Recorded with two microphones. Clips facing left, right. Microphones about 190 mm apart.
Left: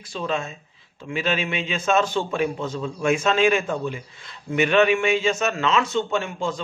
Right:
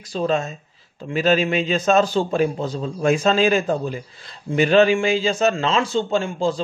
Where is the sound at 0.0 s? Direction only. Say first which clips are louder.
Right 5 dB; 40° right (ahead or behind).